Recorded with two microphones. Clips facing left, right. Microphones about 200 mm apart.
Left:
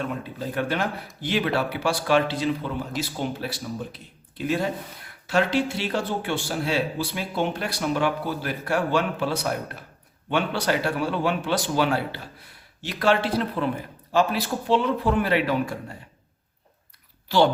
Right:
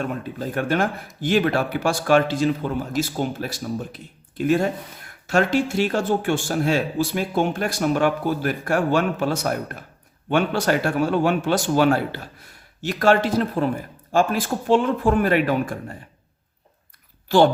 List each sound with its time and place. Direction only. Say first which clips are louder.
0.0 s speech: right 3 dB; 50° right (ahead or behind)
17.2 s a child's voice: right 4 dB; 50° right (ahead or behind)